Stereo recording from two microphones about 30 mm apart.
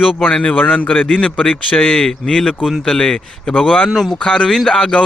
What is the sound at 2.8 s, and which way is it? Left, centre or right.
Speech, left.